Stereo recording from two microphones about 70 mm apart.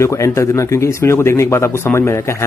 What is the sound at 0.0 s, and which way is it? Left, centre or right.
A man's voice, left.